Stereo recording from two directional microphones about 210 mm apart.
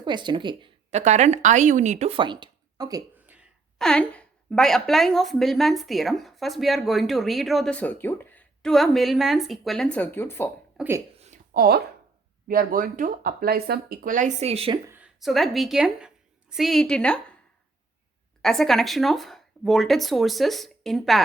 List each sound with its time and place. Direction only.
0.0 s a woman's voice: 20° right (ahead or behind); by 10.5 s 10° left (ahead or behind)
10.8 s speech: 10° right (ahead or behind)
11.2 s a sound: 40° right (ahead or behind)
12.5 s speech: 40° right (ahead or behind)
14.8 s a woman's voice: 5° right (ahead or behind)
18.4 s a woman's voice: centre (ahead or behind)